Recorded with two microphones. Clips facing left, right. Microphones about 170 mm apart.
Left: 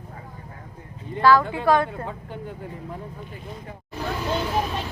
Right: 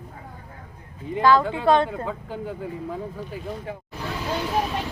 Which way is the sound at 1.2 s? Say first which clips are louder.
Even; 20° right (ahead or behind).